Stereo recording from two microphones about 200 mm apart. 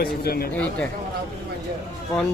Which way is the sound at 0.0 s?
50° left (ahead or behind).